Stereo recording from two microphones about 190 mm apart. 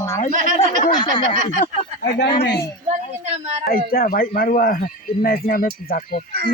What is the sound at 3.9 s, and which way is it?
Speech, 50° left (ahead or behind).